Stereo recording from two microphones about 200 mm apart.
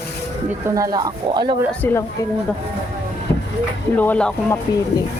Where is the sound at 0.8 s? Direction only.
15° right (ahead or behind).